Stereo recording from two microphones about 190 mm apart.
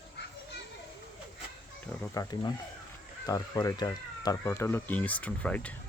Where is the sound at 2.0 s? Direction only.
20° left (ahead or behind).